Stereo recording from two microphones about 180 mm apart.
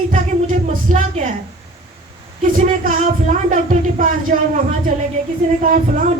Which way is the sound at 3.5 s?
50° right (ahead or behind).